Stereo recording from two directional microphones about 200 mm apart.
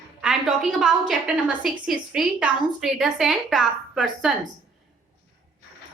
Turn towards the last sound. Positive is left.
turn(degrees=0)  # may be behind; listen again after turning